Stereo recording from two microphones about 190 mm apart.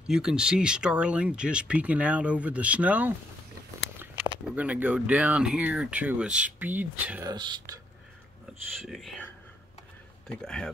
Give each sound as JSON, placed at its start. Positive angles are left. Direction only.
{"t": 0.1, "sound": "speech", "side_deg": -5}
{"t": 4.6, "sound": "speech", "side_deg": -5}
{"t": 7.2, "sound": "speech", "side_deg": -25}
{"t": 8.8, "sound": "speech", "side_deg": 0}